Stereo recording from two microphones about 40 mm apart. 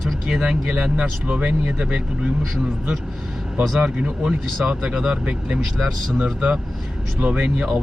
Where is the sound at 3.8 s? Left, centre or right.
Right.